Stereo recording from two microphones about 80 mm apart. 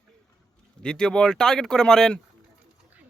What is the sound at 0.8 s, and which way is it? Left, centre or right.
Speech, centre.